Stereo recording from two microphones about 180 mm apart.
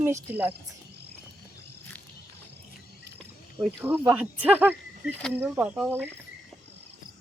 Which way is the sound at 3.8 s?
10° right (ahead or behind).